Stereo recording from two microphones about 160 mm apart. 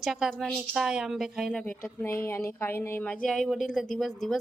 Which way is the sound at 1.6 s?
15° left (ahead or behind).